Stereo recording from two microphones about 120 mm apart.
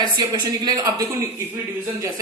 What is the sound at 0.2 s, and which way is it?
Speech, 35° right (ahead or behind).